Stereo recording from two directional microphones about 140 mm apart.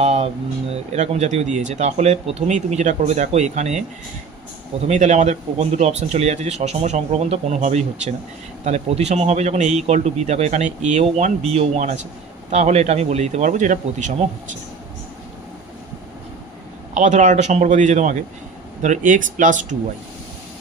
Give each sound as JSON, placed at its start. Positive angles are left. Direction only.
{"t": 0.0, "sound": "speech", "side_deg": -50}
{"t": 4.8, "sound": "speech", "side_deg": -55}
{"t": 16.9, "sound": "speech", "side_deg": -60}